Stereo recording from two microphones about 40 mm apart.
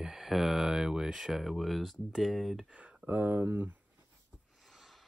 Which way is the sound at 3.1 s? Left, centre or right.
Right.